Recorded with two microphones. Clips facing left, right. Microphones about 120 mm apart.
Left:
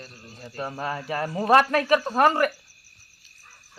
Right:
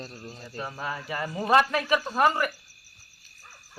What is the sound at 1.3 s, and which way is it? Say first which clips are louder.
Speech: left 3 dB; 35° left (ahead or behind).